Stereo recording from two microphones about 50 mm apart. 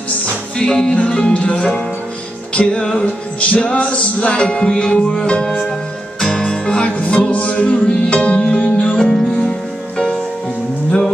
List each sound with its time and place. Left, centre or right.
0.6 s music: centre
3.3 s music: left